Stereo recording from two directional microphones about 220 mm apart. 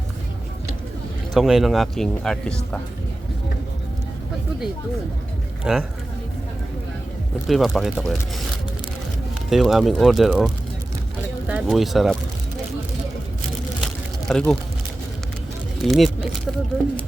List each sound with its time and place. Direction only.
1.3 s speech: centre (ahead or behind)
5.7 s speech: centre (ahead or behind)
7.4 s speech: centre (ahead or behind)
9.5 s speech: centre (ahead or behind)
13.8 s a sound: 5° left (ahead or behind)
15.8 s speech: centre (ahead or behind)